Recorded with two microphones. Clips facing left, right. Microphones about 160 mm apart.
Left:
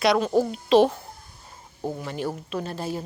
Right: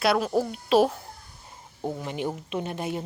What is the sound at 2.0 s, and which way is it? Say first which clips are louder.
Speech: left 1 dB; 15° right (ahead or behind).